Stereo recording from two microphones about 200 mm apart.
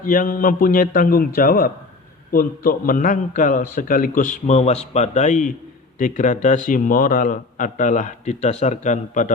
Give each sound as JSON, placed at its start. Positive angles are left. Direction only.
{"t": 0.0, "sound": "a man's voice", "side_deg": 45}